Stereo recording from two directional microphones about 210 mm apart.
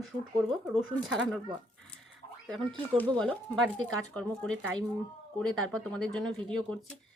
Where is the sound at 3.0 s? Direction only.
5° left (ahead or behind).